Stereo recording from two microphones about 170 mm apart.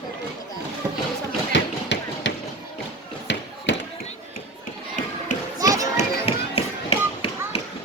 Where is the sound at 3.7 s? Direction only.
90° left.